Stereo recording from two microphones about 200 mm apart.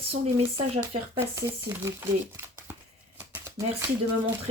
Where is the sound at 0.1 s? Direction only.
25° right (ahead or behind).